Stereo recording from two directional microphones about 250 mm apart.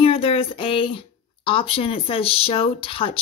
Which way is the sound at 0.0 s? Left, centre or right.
Left.